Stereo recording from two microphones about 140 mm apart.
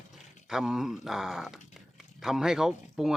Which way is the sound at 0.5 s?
5° right (ahead or behind).